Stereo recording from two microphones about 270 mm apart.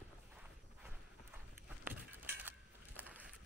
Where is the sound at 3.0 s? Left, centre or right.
Centre.